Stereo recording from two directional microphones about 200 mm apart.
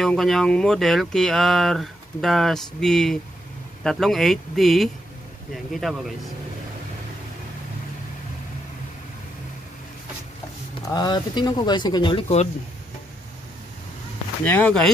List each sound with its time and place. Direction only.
0.0 s speech: centre (ahead or behind)
10.9 s speech: 20° left (ahead or behind)
14.4 s speech: 10° left (ahead or behind)